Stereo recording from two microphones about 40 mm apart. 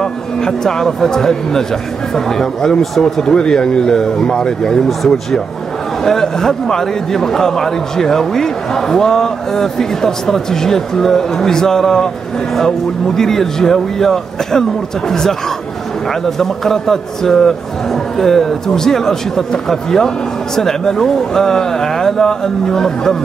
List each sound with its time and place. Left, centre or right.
0.0 s a man's voice: centre
4.8 s a man's voice: centre
16.3 s a man's voice: centre